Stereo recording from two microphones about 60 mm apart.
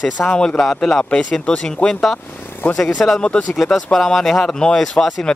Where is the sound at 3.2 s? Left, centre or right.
Centre.